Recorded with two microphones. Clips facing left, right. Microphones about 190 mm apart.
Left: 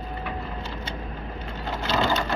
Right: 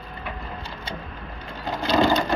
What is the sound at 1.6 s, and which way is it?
Sewing machine, 15° right (ahead or behind).